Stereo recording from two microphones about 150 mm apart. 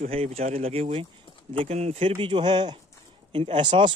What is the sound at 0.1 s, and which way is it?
Speech, 40° right (ahead or behind).